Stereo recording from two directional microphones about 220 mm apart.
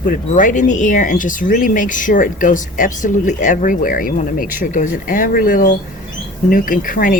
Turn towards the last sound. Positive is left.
turn(degrees=40)  # may be behind; listen again after turning